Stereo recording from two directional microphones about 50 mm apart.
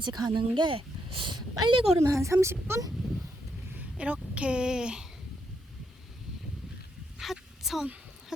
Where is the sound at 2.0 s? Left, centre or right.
Right.